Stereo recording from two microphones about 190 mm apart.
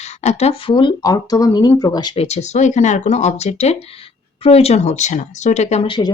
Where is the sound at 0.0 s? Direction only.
35° left (ahead or behind).